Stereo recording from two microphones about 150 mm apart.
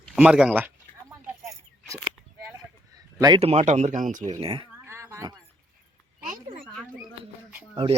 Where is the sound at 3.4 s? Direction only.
45° right (ahead or behind).